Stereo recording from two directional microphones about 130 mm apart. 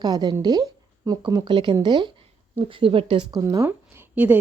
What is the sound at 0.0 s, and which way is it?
Speech, 30° right (ahead or behind).